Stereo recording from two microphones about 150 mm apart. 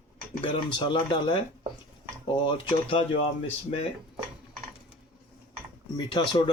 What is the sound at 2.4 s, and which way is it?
Speech, 35° left (ahead or behind).